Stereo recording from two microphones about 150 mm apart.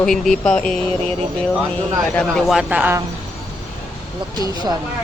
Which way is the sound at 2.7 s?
15° right (ahead or behind).